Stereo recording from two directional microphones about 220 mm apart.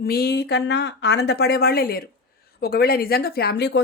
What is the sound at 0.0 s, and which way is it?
Speech, 45° left (ahead or behind).